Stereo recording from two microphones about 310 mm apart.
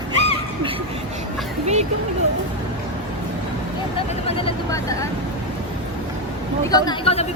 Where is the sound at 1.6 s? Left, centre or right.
Right.